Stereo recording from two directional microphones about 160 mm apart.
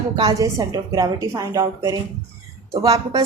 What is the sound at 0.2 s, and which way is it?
A woman's voice, 25° right (ahead or behind).